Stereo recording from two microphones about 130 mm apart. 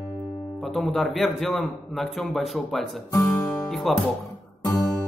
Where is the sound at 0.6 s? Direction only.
Centre (ahead or behind).